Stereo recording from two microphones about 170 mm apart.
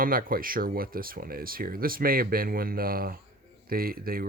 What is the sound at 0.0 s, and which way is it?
Speech, 55° right (ahead or behind).